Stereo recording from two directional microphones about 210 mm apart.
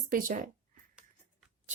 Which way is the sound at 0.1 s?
40° right (ahead or behind).